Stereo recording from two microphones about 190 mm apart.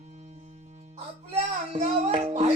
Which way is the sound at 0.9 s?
35° right (ahead or behind).